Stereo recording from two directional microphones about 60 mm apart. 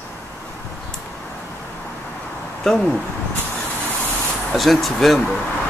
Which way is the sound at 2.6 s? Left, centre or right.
Centre.